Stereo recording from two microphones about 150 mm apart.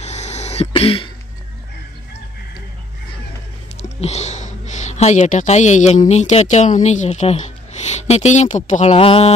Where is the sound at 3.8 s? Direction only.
45° left (ahead or behind).